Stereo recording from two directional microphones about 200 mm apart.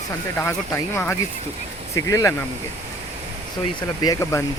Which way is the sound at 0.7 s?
10° left (ahead or behind).